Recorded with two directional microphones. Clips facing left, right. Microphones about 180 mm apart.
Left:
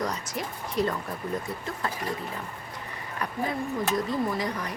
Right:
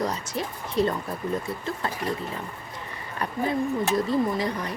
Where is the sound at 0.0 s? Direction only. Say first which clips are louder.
Right 3 dB; 30° right (ahead or behind).